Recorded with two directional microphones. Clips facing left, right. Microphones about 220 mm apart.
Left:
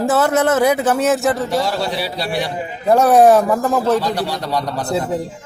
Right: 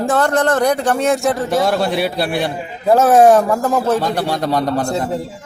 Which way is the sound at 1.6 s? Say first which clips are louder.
Right 4 dB; 55° right (ahead or behind).